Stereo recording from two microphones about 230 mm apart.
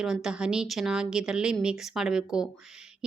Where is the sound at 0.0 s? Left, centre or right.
Centre.